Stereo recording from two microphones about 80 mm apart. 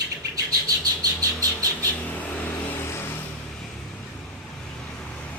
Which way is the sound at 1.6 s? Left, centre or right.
Left.